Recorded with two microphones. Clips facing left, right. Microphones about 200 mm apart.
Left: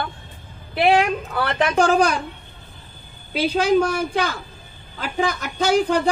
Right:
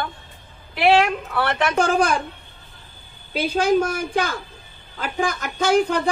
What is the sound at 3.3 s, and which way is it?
Speech, 50° right (ahead or behind).